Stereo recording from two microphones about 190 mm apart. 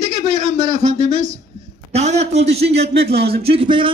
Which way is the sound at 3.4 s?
30° right (ahead or behind).